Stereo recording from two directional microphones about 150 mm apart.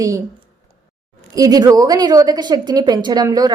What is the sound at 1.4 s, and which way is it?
A woman's voice, 25° right (ahead or behind).